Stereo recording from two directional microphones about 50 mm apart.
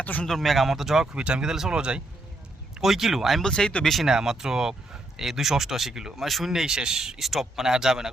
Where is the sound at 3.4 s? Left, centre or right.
Centre.